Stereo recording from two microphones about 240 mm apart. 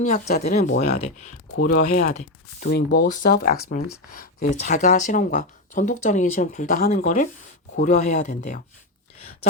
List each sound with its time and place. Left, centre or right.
0.1 s speech: left